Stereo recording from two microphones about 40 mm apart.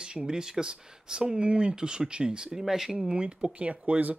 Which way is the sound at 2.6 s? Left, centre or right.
Centre.